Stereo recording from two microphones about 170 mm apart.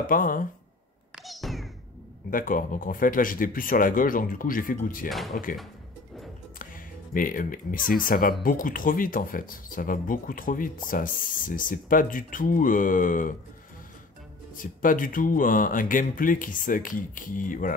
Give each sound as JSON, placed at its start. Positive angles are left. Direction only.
{"t": 0.0, "sound": "speech", "side_deg": 55}
{"t": 1.2, "sound": "cat", "side_deg": 0}
{"t": 2.3, "sound": "speech", "side_deg": 55}
{"t": 7.2, "sound": "speech", "side_deg": 55}
{"t": 14.6, "sound": "speech", "side_deg": 50}